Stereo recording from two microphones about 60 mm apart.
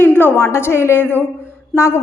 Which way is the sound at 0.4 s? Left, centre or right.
Left.